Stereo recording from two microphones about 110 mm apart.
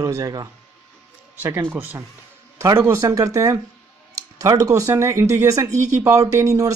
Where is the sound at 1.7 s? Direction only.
20° right (ahead or behind).